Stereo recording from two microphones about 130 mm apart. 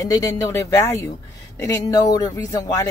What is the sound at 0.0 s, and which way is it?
Speech, 25° left (ahead or behind).